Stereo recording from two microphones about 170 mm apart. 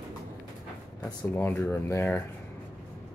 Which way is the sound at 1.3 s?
10° left (ahead or behind).